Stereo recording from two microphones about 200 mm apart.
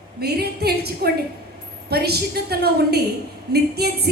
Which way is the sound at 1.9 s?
50° right (ahead or behind).